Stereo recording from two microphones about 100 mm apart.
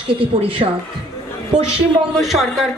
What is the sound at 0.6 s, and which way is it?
Speech, 90° right.